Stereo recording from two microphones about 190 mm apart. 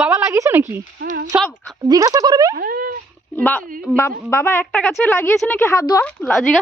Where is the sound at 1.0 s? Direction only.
45° right (ahead or behind).